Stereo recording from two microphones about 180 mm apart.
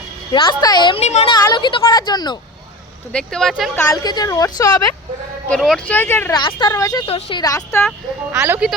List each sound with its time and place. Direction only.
0.3 s speech: 25° left (ahead or behind)
1.0 s speech: 35° left (ahead or behind)
1.3 s speech: 25° left (ahead or behind)
3.1 s speech: 5° left (ahead or behind)
4.0 s speech: 20° left (ahead or behind)
5.5 s speech: centre (ahead or behind)
6.3 s speech: 25° left (ahead or behind)
8.3 s speech: 15° right (ahead or behind)